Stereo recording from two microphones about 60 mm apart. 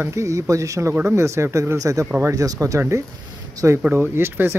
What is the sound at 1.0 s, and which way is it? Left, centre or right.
Speech, right.